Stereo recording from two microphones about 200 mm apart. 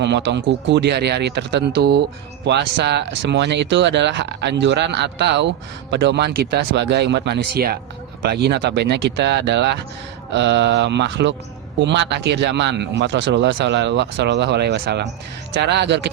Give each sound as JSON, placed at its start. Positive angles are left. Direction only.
{"t": 0.0, "sound": "speech", "side_deg": -60}